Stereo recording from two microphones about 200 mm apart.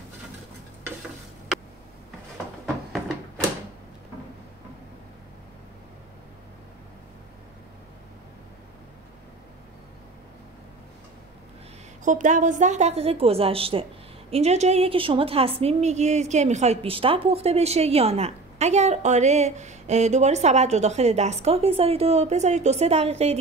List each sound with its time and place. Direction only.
12.0 s a woman's voice: 40° right (ahead or behind)